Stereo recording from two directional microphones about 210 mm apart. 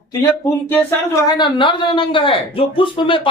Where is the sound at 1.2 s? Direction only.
20° left (ahead or behind).